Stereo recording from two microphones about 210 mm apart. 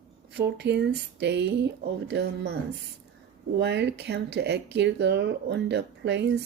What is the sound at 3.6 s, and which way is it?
Speech, 55° right (ahead or behind).